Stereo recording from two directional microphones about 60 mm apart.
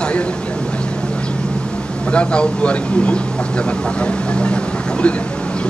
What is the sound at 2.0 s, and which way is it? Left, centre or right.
Speech, centre.